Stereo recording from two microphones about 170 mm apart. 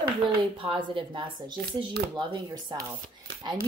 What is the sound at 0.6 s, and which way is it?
Speech, 30° right (ahead or behind).